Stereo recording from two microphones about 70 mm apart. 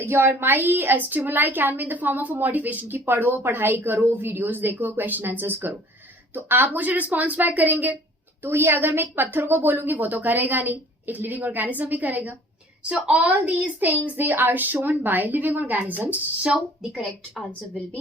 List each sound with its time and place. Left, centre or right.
0.0 s a woman's voice: right; by 16.6 s centre